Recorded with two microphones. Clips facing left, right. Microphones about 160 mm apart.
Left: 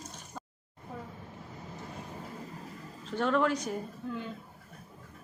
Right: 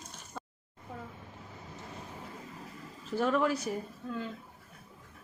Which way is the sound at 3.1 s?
5° right (ahead or behind).